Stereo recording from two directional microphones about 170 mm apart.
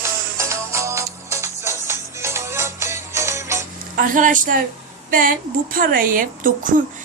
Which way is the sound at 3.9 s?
50° right (ahead or behind).